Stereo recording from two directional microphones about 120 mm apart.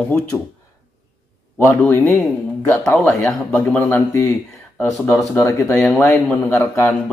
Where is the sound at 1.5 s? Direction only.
25° left (ahead or behind).